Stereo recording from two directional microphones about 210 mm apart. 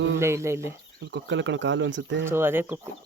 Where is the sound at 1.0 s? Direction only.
60° right (ahead or behind).